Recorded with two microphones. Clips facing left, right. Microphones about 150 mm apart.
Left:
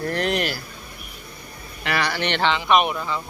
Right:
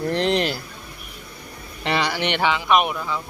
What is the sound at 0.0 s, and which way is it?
Speech, 25° right (ahead or behind).